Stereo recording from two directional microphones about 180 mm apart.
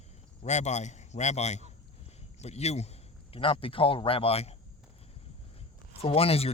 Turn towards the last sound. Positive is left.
turn(degrees=35)  # may be behind; listen again after turning